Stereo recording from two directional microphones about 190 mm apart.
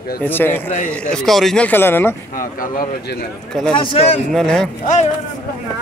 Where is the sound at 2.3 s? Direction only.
45° left (ahead or behind).